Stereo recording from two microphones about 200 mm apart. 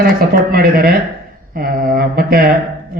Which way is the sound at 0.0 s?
50° right (ahead or behind).